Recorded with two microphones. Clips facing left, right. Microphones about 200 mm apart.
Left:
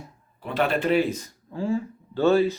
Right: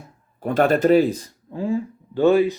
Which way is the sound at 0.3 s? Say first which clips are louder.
Right 6 dB; 45° right (ahead or behind).